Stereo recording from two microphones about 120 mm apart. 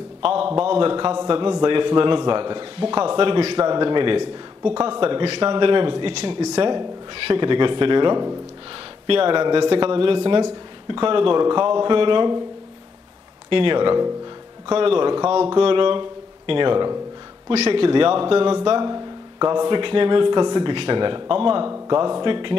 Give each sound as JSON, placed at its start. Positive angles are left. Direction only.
{"t": 0.2, "sound": "a man's voice", "side_deg": -50}
{"t": 9.0, "sound": "a man's voice", "side_deg": -45}
{"t": 13.5, "sound": "a man's voice", "side_deg": -45}
{"t": 17.6, "sound": "a man's voice", "side_deg": -50}